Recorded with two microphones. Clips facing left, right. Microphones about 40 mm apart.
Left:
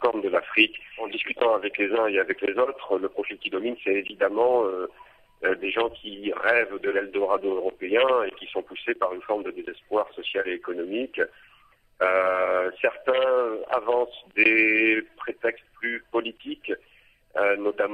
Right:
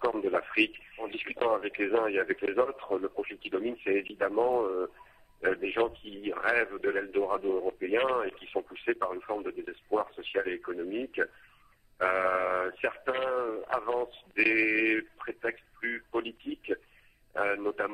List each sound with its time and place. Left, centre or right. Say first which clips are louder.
0.0 s speech: left 5 dB; left
3.8 s speech: left 4 dB; left
4.3 s speech: left 5 dB; left
5.4 s speech: left 4 dB; left
5.8 s speech: left 3 dB; left
6.2 s speech: left 6 dB; left
8.8 s speech: left 6 dB; left
13.0 s speech: left 9 dB; left
14.3 s speech: left 6 dB; left